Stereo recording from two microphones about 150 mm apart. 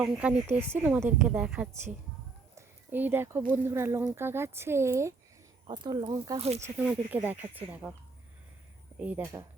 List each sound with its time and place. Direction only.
0.0 s speech: 10° right (ahead or behind)
2.6 s a sound: 15° right (ahead or behind)
3.5 s speech: 15° right (ahead or behind)
5.6 s speech: 30° right (ahead or behind)
6.4 s speech: 45° right (ahead or behind)
6.7 s speech: 10° right (ahead or behind)
9.0 s speech: 10° right (ahead or behind)